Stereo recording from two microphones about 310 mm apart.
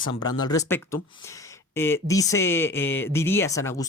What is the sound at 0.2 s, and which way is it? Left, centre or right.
Speech, centre.